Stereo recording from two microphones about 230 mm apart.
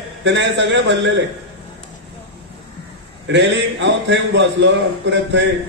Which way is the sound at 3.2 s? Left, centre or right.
Right.